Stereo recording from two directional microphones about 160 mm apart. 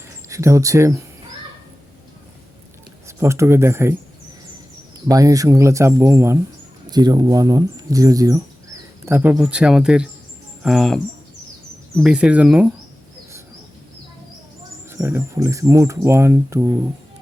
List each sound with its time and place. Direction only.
0.3 s speech: 20° right (ahead or behind)
3.1 s speech: 15° right (ahead or behind)
5.0 s speech: 20° right (ahead or behind)
14.8 s speech: 15° right (ahead or behind)